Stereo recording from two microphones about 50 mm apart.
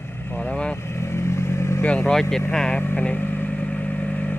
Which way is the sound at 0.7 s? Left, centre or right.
Left.